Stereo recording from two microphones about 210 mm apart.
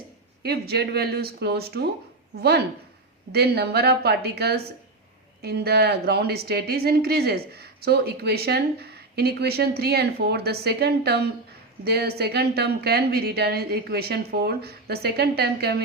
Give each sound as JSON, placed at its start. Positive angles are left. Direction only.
{"t": 0.4, "sound": "speech", "side_deg": -50}
{"t": 3.3, "sound": "speech", "side_deg": -50}